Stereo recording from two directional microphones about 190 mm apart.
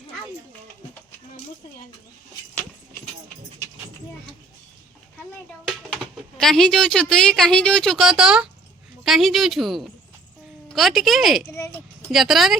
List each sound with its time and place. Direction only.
5.6 s speech: centre (ahead or behind)
11.5 s a sound: 15° left (ahead or behind)
12.1 s speech: centre (ahead or behind)